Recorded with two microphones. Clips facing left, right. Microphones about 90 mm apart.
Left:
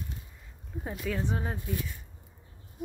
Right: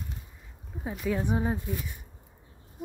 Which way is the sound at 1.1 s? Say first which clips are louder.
Right 5 dB; 15° right (ahead or behind).